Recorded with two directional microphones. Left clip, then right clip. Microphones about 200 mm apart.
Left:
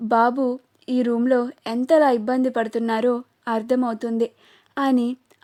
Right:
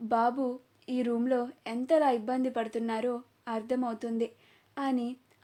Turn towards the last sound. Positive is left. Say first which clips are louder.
# left 11 dB
turn(degrees=50)  # may be behind; listen again after turning